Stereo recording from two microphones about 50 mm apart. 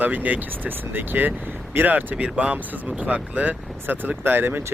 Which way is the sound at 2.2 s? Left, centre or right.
Right.